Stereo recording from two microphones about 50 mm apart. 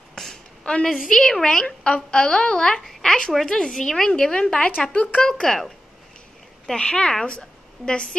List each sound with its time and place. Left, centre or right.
0.2 s a sound: centre
0.7 s a woman's voice: centre
5.2 s a woman's voice: centre
6.7 s a woman's voice: centre